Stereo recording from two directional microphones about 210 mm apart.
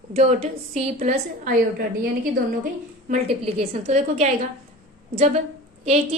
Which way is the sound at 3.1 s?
25° right (ahead or behind).